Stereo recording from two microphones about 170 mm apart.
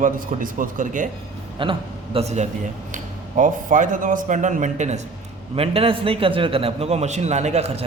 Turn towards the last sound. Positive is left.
turn(degrees=-40)  # may be behind; listen again after turning